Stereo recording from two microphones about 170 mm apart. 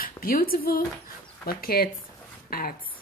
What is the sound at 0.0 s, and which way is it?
Speech, 60° left (ahead or behind).